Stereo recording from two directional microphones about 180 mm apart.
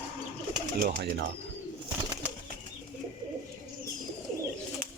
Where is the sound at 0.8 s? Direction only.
65° right (ahead or behind).